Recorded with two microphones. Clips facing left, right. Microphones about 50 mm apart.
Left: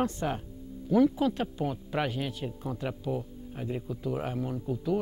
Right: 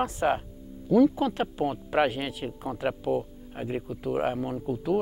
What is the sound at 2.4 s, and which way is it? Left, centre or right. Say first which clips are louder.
Speech: right 4 dB; right.